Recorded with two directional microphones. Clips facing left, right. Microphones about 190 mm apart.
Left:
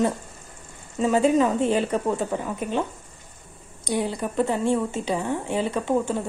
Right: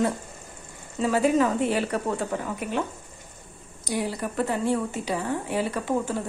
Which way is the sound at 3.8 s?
25° left (ahead or behind).